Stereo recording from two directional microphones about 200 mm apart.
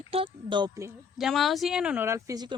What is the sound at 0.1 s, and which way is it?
Speech, 25° right (ahead or behind).